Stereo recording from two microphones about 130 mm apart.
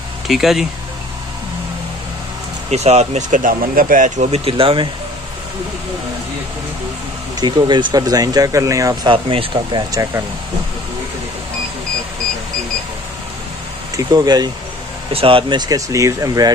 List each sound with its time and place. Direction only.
0.3 s speech: centre (ahead or behind)
2.7 s speech: 55° right (ahead or behind); by 4.3 s 90° right
4.3 s speech: 45° right (ahead or behind)
7.3 s speech: 35° right (ahead or behind)
9.1 s speech: 45° right (ahead or behind); by 10.2 s 30° right (ahead or behind)
13.9 s speech: 30° right (ahead or behind)
15.1 s speech: 45° right (ahead or behind)
15.7 s speech: 25° right (ahead or behind)